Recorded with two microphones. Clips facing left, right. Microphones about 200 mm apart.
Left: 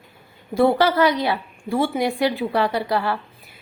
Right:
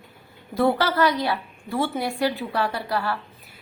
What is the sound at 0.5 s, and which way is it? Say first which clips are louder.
A woman's voice: left 4 dB; 15° left (ahead or behind).